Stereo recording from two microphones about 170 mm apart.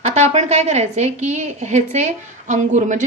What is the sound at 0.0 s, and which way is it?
A woman's voice, 40° right (ahead or behind).